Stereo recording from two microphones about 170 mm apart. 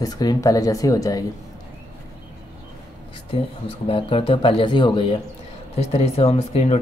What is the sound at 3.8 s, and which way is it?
Speech, 35° left (ahead or behind).